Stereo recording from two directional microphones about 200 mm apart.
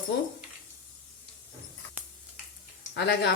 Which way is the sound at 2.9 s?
60° left (ahead or behind).